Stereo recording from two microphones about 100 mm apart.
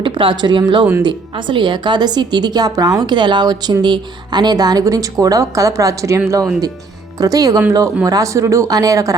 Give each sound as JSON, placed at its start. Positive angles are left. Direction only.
{"t": 0.0, "sound": "a woman's voice", "side_deg": -55}